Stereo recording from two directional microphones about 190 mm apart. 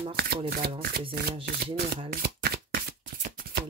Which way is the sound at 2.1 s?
55° right (ahead or behind).